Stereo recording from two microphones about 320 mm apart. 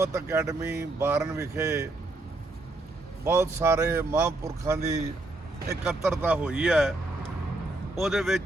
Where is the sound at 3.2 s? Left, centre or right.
Centre.